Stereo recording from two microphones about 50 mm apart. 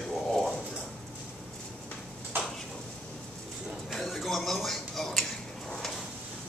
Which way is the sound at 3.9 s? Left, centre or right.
Centre.